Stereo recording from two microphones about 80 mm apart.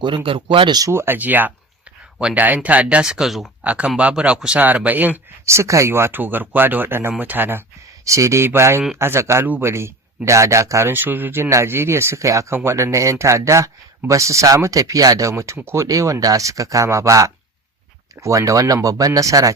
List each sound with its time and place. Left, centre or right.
0.0 s speech: right
0.9 s speech: right; by 3.5 s centre
3.6 s speech: centre
5.5 s speech: right
8.0 s speech: right
10.8 s speech: right